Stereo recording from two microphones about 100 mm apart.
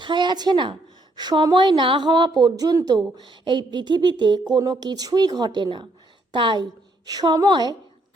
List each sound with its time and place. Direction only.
0.0 s a woman's voice: 50° right (ahead or behind)
3.2 s speech: 50° right (ahead or behind)